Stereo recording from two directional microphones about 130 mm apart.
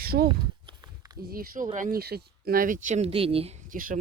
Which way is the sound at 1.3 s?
90° right.